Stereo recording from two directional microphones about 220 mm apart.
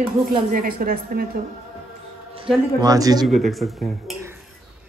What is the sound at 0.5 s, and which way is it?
Speech, 40° right (ahead or behind).